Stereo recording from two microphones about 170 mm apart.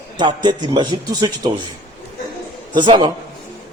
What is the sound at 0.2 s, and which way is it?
A man's voice, 25° right (ahead or behind).